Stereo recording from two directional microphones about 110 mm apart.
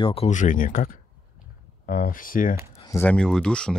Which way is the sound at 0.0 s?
65° left (ahead or behind).